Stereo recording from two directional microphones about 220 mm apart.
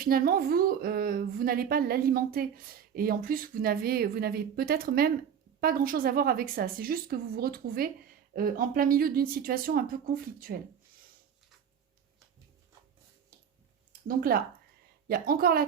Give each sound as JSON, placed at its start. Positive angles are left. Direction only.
{"t": 0.0, "sound": "a woman's voice", "side_deg": -40}
{"t": 14.1, "sound": "a woman's voice", "side_deg": -40}